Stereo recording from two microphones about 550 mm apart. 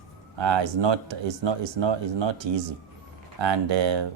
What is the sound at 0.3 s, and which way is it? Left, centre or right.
A man's voice, right.